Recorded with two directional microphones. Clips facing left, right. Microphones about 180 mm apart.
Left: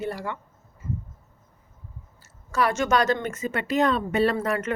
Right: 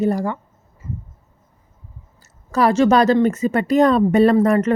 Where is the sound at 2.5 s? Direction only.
35° right (ahead or behind).